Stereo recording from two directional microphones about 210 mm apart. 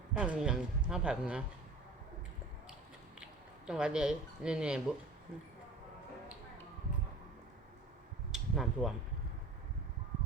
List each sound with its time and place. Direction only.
0.1 s a woman's voice: 5° right (ahead or behind)
3.7 s a woman's voice: 5° right (ahead or behind)
8.3 s a sound: centre (ahead or behind)